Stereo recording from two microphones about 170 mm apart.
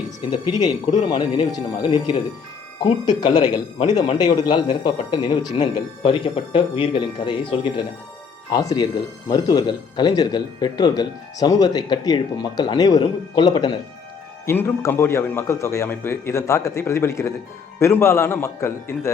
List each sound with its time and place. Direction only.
0.2 s a man's voice: 25° left (ahead or behind)